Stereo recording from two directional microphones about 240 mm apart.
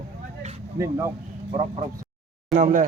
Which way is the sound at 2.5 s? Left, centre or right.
Right.